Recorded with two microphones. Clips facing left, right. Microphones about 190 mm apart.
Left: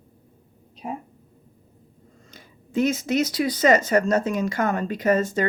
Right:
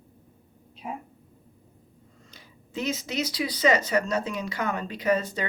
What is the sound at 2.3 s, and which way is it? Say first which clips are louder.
Speech: left 9 dB; 50° left (ahead or behind).